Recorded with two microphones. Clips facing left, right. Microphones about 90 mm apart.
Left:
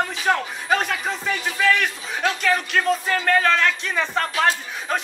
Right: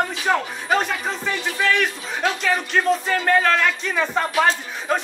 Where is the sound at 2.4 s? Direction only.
Centre (ahead or behind).